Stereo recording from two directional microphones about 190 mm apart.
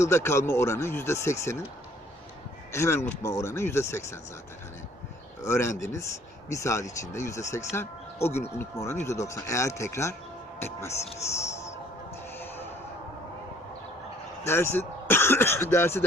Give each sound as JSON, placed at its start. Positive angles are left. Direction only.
{"t": 0.0, "sound": "speech", "side_deg": 15}
{"t": 2.7, "sound": "speech", "side_deg": 15}
{"t": 5.4, "sound": "speech", "side_deg": 15}
{"t": 14.4, "sound": "speech", "side_deg": 10}